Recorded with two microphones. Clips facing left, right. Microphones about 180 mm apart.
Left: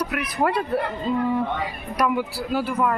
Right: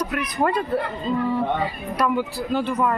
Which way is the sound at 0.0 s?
10° left (ahead or behind).